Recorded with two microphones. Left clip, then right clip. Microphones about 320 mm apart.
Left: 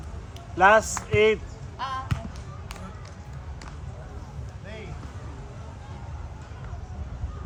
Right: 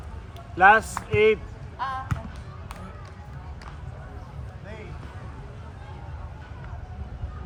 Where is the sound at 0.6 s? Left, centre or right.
Left.